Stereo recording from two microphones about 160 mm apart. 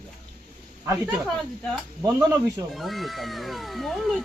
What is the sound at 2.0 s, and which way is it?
Speech, 20° right (ahead or behind).